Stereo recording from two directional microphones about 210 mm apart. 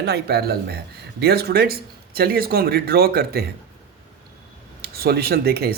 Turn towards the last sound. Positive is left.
turn(degrees=-50)  # may be behind; listen again after turning